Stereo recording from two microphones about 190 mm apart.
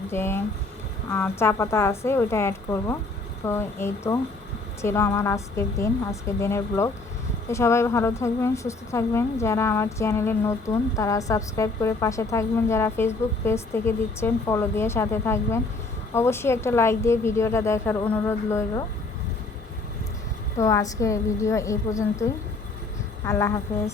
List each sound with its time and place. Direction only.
0.1 s a woman's voice: 10° left (ahead or behind)
20.6 s a woman's voice: 15° left (ahead or behind)